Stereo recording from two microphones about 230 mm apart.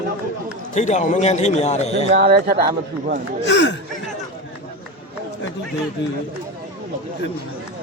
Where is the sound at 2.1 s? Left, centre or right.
Right.